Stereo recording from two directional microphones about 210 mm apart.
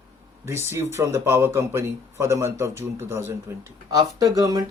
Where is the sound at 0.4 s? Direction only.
15° right (ahead or behind).